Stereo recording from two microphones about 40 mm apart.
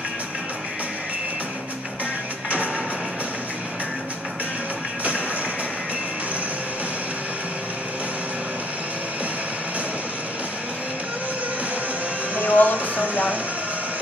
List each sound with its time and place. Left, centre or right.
12.4 s music: left